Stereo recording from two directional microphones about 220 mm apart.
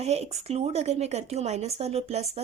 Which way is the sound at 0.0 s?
30° right (ahead or behind).